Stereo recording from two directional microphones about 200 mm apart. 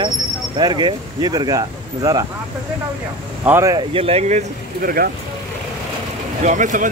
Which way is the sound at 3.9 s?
30° right (ahead or behind).